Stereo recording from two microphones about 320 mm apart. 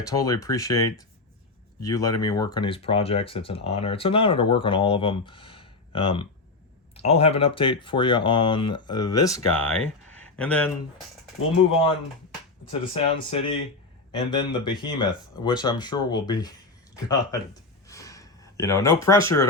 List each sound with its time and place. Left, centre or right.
0.2 s speech: centre
12.9 s speech: centre
16.9 s a sound: centre